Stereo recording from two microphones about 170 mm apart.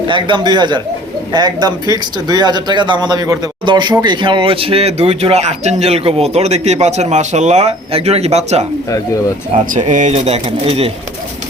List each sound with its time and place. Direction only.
0.1 s speech: 30° right (ahead or behind)
9.7 s speech: 45° right (ahead or behind)